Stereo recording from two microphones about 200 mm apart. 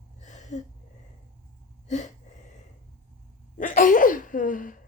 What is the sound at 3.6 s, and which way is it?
Sneeze, 40° left (ahead or behind).